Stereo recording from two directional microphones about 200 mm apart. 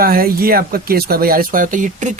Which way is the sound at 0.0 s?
50° right (ahead or behind).